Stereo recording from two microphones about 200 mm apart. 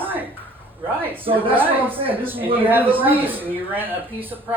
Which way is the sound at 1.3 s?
25° right (ahead or behind).